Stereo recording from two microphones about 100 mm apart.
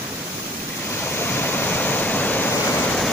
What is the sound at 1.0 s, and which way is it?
Waves, 20° left (ahead or behind).